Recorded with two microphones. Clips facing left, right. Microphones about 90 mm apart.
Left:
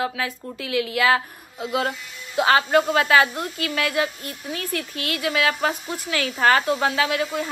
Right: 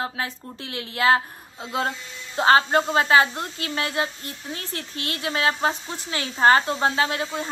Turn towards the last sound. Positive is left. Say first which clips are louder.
# left 2 dB
turn(degrees=-30)  # may be behind; listen again after turning